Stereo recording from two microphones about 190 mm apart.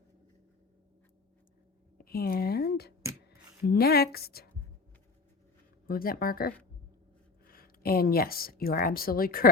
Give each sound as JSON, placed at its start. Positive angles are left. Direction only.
{"t": 2.0, "sound": "a sound", "side_deg": 50}
{"t": 3.7, "sound": "a woman's voice", "side_deg": 55}
{"t": 5.9, "sound": "a woman's voice", "side_deg": 50}